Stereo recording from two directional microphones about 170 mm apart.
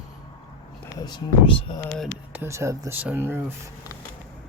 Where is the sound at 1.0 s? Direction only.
25° left (ahead or behind).